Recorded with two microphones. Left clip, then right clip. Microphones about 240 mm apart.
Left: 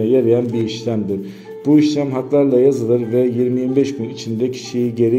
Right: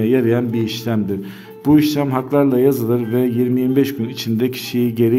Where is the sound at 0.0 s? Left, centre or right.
Right.